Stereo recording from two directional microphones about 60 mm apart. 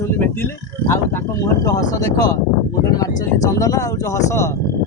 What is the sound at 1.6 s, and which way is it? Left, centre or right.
Speech, left.